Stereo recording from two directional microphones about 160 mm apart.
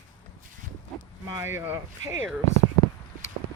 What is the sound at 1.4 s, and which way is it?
Speech, 15° right (ahead or behind).